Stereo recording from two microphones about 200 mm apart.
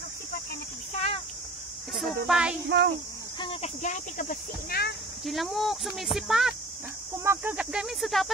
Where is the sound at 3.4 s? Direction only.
30° left (ahead or behind); by 5.0 s 50° left (ahead or behind).